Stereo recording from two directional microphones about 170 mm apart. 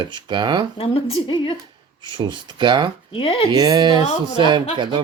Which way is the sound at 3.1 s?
30° left (ahead or behind).